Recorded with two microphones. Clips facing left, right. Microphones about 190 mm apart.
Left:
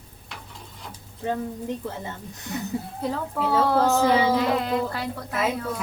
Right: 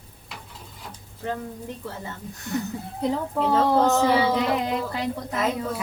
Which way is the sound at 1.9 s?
20° left (ahead or behind).